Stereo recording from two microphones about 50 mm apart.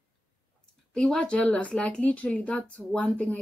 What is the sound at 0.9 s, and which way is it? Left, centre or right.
A woman's voice, centre.